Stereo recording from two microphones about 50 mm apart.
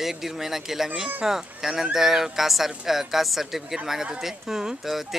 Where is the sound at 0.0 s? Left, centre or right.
Centre.